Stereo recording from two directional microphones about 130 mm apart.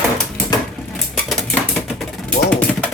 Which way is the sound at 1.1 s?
Centre (ahead or behind).